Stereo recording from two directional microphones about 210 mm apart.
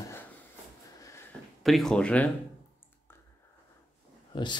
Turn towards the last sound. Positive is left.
turn(degrees=20)  # may be behind; listen again after turning